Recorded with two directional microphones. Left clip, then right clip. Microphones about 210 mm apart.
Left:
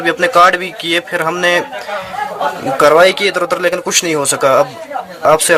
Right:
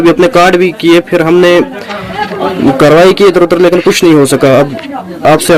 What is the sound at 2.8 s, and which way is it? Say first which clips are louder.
A man's voice: right 4 dB; 15° left (ahead or behind).